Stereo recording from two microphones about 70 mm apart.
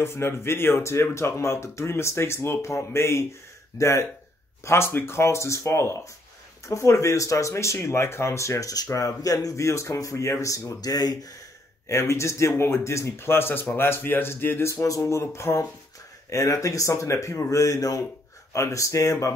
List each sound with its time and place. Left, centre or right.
0.0 s speech: left
10.8 s speech: left
11.9 s speech: left
14.7 s speech: left